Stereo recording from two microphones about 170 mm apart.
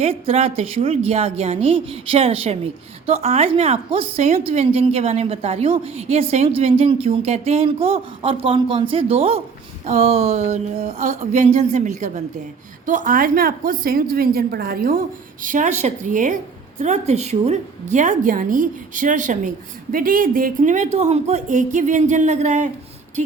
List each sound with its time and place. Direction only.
0.0 s a woman's voice: 35° right (ahead or behind)